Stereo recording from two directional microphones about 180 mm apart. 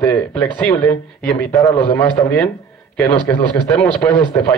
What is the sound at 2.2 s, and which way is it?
Speech, 15° left (ahead or behind).